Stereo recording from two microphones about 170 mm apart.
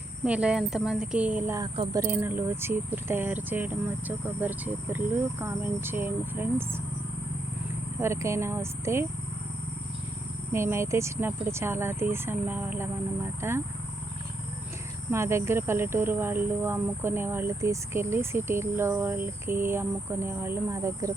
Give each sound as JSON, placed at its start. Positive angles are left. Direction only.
{"t": 0.3, "sound": "speech", "side_deg": -5}
{"t": 8.0, "sound": "speech", "side_deg": -15}
{"t": 10.5, "sound": "speech", "side_deg": -15}
{"t": 15.1, "sound": "speech", "side_deg": -15}